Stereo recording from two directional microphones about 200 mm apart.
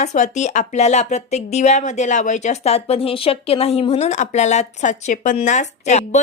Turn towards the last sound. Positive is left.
turn(degrees=35)  # may be behind; listen again after turning